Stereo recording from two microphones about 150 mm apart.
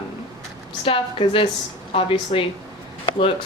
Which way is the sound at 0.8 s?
40° left (ahead or behind).